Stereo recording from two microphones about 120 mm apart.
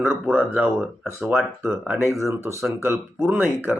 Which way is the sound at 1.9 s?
20° right (ahead or behind).